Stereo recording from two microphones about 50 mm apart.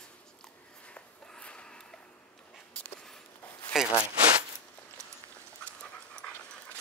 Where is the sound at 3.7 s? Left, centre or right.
Centre.